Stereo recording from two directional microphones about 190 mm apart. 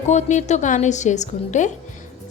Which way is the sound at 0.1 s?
40° left (ahead or behind).